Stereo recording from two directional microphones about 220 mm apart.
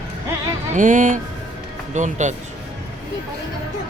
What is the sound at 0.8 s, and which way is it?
Speech, 35° right (ahead or behind).